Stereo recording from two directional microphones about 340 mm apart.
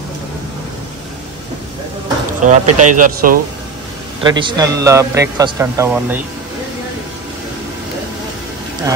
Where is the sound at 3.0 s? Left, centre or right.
Right; by 6.2 s centre.